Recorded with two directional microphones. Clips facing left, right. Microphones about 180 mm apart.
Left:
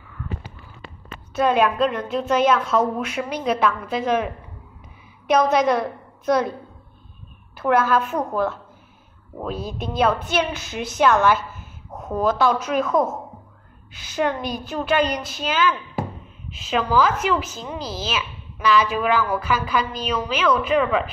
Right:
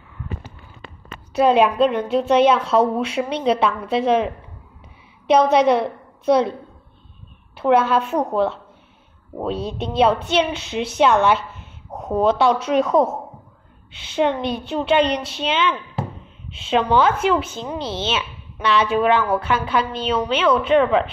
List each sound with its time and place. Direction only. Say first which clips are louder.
1.4 s a woman's voice: right 3 dB; 30° right (ahead or behind)
7.6 s speech: right 2 dB; 30° right (ahead or behind)
14.1 s speech: right 3 dB; 25° right (ahead or behind)